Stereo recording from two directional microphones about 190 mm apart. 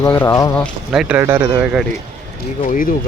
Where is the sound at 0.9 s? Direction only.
5° right (ahead or behind).